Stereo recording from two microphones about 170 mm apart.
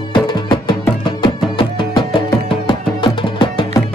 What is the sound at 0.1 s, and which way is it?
Music, 30° left (ahead or behind).